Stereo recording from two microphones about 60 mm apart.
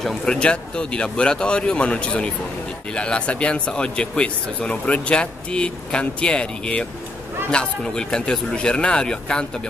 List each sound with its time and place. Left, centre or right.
0.2 s speech: centre